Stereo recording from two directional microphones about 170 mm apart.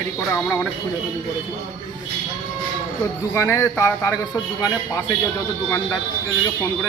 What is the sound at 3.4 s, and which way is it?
A man's voice, 15° left (ahead or behind).